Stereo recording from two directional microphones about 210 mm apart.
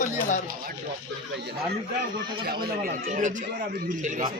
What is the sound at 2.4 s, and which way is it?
A man's voice, 45° right (ahead or behind).